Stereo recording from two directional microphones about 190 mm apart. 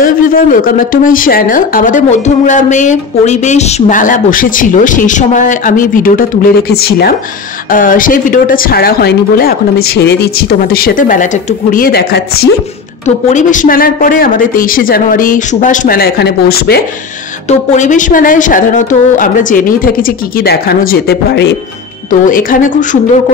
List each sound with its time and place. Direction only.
0.0 s speech: 50° left (ahead or behind)
13.0 s speech: 40° left (ahead or behind); by 16.8 s 55° left (ahead or behind)
17.5 s speech: 40° left (ahead or behind)